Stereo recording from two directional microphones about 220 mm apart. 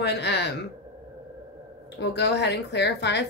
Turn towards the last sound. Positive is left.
turn(degrees=50)  # may be behind; listen again after turning